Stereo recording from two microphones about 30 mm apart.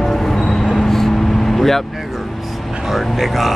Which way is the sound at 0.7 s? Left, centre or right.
Centre.